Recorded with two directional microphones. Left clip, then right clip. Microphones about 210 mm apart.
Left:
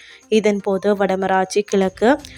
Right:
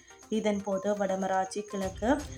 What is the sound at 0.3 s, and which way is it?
Speech, 40° left (ahead or behind).